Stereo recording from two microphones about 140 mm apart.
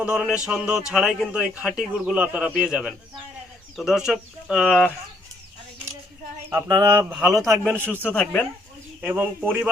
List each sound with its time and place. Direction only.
0.0 s a man's voice: 5° right (ahead or behind)
6.5 s speech: 20° right (ahead or behind)
6.8 s a man's voice: 10° right (ahead or behind)
7.3 s speech: 25° right (ahead or behind)
8.0 s speech: 5° left (ahead or behind)
9.0 s a man's voice: 10° right (ahead or behind)